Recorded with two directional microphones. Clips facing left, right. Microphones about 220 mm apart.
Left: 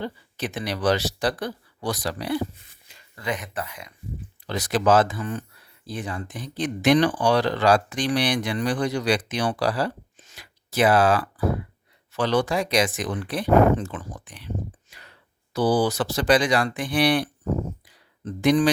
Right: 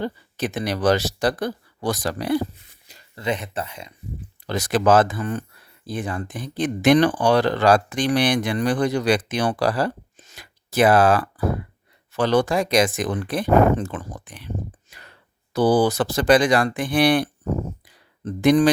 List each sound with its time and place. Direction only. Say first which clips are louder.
0.0 s speech: right 4 dB; 45° right (ahead or behind)
3.2 s speech: right 4 dB; 25° right (ahead or behind)
4.4 s speech: right 2 dB; 45° right (ahead or behind)
14.8 s whispering: right 2 dB; 50° right (ahead or behind)
15.5 s speech: right 3 dB; 50° right (ahead or behind)
18.4 s speech: right 3 dB; 50° right (ahead or behind)